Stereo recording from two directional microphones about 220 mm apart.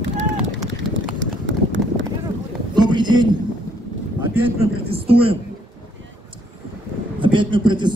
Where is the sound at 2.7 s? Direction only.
20° right (ahead or behind).